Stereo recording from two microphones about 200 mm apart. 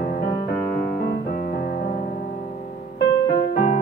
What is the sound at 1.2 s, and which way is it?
Music, 45° left (ahead or behind).